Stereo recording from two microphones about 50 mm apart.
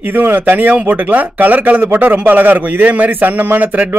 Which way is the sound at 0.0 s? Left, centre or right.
Right.